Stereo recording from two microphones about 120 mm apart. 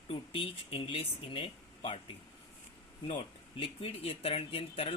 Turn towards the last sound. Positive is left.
turn(degrees=50)  # may be behind; listen again after turning